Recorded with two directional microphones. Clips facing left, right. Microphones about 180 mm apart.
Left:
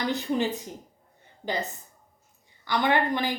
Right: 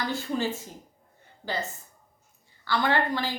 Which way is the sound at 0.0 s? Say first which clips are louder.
Left 2 dB; 20° left (ahead or behind).